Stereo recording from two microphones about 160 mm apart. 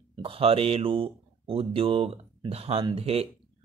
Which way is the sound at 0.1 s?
35° right (ahead or behind).